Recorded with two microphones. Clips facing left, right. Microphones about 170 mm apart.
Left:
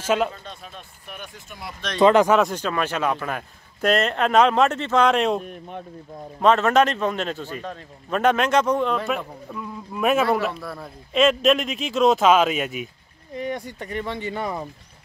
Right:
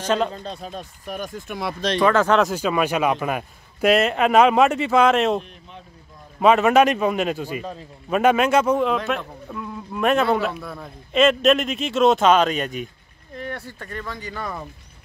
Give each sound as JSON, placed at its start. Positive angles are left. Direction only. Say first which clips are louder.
{"t": 0.0, "sound": "speech", "louder": "even", "side_deg": 5}
{"t": 0.3, "sound": "speech", "louder": "right 7 dB", "side_deg": -35}
{"t": 1.5, "sound": "speech", "louder": "right 10 dB", "side_deg": -75}
{"t": 2.0, "sound": "speech", "louder": "left 3 dB", "side_deg": 20}
{"t": 2.3, "sound": "a man's voice", "louder": "right 1 dB", "side_deg": -5}
{"t": 5.4, "sound": "speech", "louder": "left 8 dB", "side_deg": 55}
{"t": 6.4, "sound": "a man's voice", "louder": "right 2 dB", "side_deg": -10}